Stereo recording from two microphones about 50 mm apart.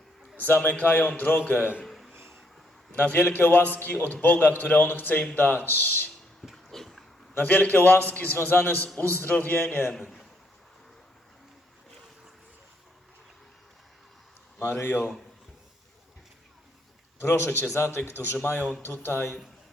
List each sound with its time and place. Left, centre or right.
0.3 s a man's voice: left
1.8 s a sound: centre
2.1 s vehicle: right
3.0 s a man's voice: left
4.2 s a man's voice: left
6.4 s dog: centre
7.3 s a man's voice: left
8.1 s a man's voice: left
9.6 s speech: left
14.8 s speech: left
17.2 s speech: left
18.4 s a man's voice: left
18.8 s speech: left